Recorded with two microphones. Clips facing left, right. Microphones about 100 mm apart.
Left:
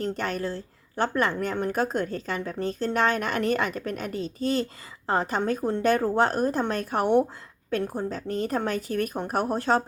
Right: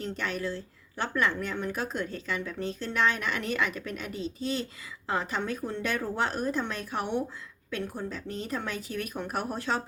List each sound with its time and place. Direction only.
0.0 s a woman's voice: 45° left (ahead or behind)